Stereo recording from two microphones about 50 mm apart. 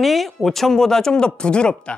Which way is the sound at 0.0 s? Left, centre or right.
Centre.